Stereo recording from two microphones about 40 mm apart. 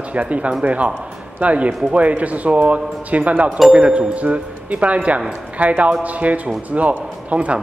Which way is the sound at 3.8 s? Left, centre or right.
Right.